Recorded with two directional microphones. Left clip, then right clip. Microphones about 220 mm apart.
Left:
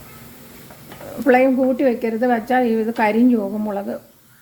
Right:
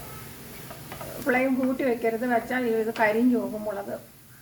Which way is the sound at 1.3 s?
40° left (ahead or behind).